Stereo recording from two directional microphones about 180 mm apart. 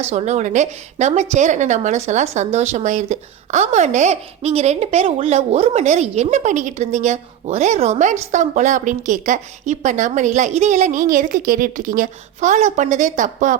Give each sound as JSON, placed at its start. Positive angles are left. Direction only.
{"t": 0.1, "sound": "a woman's voice", "side_deg": -35}